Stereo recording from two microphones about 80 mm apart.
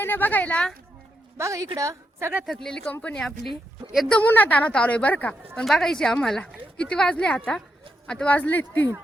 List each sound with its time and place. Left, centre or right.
0.0 s a woman's voice: left
1.4 s a woman's voice: right
2.6 s a woman's voice: centre
3.2 s speech: centre
4.1 s a woman's voice: left
5.5 s a woman's voice: centre; by 8.9 s left